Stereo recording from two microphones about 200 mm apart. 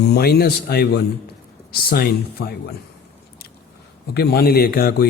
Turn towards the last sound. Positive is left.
turn(degrees=50)  # may be behind; listen again after turning